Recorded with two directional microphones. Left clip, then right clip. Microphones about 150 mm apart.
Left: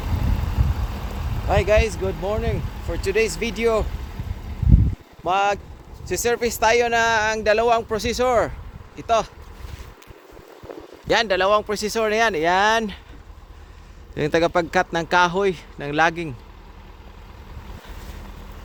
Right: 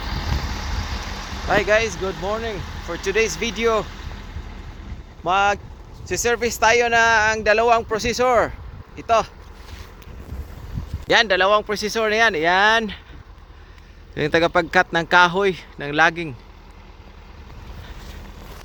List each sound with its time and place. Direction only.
0.9 s vehicle: 60° left (ahead or behind)
1.5 s speech: centre (ahead or behind)
2.2 s speech: 10° left (ahead or behind)
3.8 s vehicle: 30° left (ahead or behind)
5.2 s speech: centre (ahead or behind)
11.1 s speech: 5° right (ahead or behind)
14.2 s speech: 5° left (ahead or behind)
15.8 s speech: 10° left (ahead or behind)